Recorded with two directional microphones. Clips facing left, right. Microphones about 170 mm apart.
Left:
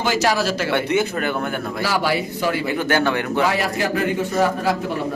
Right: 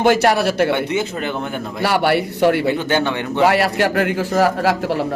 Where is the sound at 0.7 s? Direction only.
15° right (ahead or behind).